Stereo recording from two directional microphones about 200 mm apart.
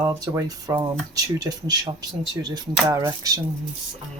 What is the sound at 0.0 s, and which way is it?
Speech, 15° right (ahead or behind).